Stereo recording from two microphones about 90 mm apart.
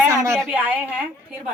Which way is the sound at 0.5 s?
20° right (ahead or behind).